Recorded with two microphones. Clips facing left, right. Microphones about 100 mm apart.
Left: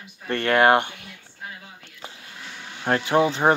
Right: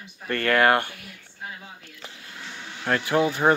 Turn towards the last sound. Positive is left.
turn(degrees=25)  # may be behind; listen again after turning